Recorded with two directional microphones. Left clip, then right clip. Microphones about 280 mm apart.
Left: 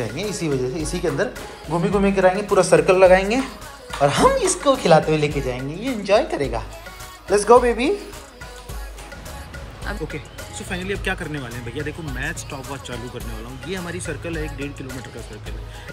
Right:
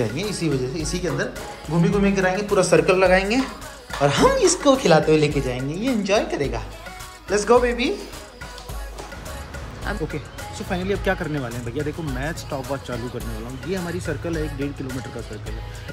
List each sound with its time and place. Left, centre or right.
0.0 s speech: centre
10.7 s speech: centre